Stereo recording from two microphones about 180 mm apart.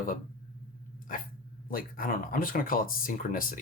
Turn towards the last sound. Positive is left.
turn(degrees=50)  # may be behind; listen again after turning